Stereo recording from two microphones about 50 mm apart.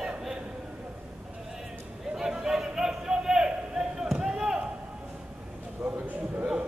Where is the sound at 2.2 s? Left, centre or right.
Centre.